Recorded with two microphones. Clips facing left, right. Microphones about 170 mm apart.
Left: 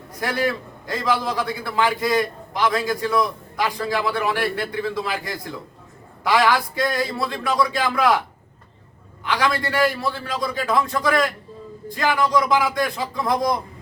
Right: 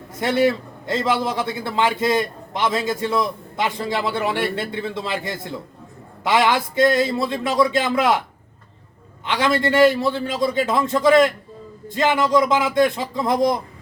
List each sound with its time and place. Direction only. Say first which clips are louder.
0.2 s a man's voice: right 5 dB; 25° right (ahead or behind)
9.2 s a man's voice: right 3 dB; 20° right (ahead or behind)